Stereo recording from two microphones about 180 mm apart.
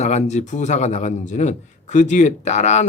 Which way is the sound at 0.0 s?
40° left (ahead or behind).